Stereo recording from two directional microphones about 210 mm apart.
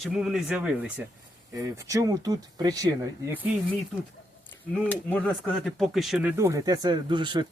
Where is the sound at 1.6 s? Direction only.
15° right (ahead or behind).